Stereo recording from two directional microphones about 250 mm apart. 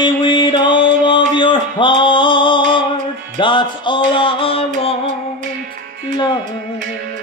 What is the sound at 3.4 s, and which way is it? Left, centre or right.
Music, centre.